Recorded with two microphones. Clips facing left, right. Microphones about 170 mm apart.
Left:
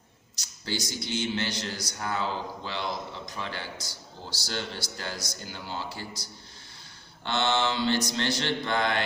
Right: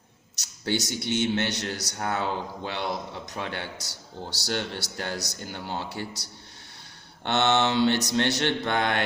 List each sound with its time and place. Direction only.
0.6 s a man's voice: 65° right (ahead or behind)
7.3 s a man's voice: 65° right (ahead or behind)